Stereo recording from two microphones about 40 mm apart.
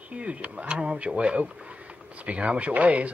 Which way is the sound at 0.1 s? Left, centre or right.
Right.